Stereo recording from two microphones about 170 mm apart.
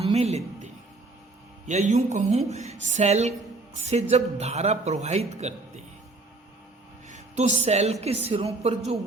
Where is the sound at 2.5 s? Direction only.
40° right (ahead or behind).